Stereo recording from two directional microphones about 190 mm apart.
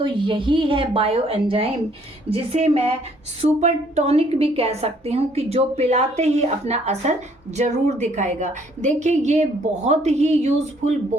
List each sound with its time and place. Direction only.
0.0 s a woman's voice: 25° right (ahead or behind)